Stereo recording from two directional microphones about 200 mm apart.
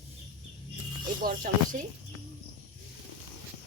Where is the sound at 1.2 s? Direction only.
45° right (ahead or behind).